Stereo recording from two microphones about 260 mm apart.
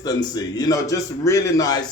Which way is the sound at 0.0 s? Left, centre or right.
Centre.